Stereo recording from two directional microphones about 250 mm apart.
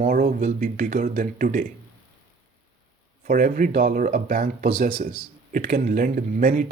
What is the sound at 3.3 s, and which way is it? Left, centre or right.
Speech, right.